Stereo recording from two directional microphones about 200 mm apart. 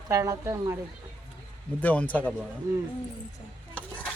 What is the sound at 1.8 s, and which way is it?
Speech, 10° left (ahead or behind).